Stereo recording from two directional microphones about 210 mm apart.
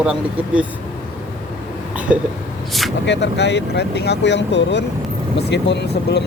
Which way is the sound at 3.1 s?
55° left (ahead or behind).